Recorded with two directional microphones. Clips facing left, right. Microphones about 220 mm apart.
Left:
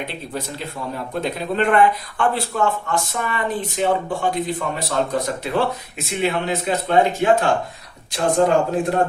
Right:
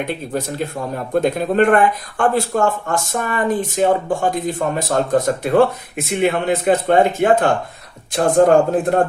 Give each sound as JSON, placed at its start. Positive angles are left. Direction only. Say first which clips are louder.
{"t": 0.3, "sound": "a man's voice", "louder": "right 5 dB", "side_deg": -45}